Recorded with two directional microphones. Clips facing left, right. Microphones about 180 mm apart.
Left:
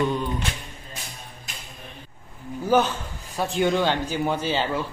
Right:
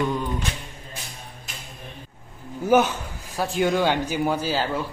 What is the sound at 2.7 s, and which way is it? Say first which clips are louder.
A man's voice: right 2 dB; 15° right (ahead or behind).